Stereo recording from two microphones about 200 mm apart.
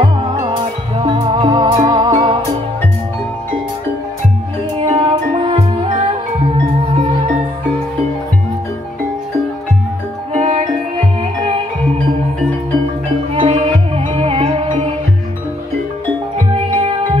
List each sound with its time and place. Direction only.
0.0 s music: 20° right (ahead or behind)
4.8 s music: 30° right (ahead or behind)
10.3 s music: 30° right (ahead or behind)
13.3 s music: 30° right (ahead or behind)
16.5 s music: 30° right (ahead or behind)